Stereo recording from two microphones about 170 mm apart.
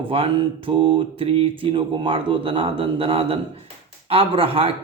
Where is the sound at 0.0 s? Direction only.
30° right (ahead or behind).